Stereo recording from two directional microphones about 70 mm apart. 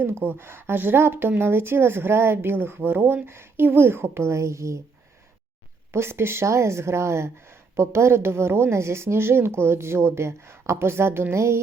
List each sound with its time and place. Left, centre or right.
0.0 s speech: right
5.9 s speech: right